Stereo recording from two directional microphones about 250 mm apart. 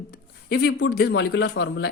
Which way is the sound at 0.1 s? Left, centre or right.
Left.